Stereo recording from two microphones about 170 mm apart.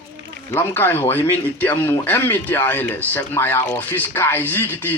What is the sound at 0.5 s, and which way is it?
Speech, 15° left (ahead or behind).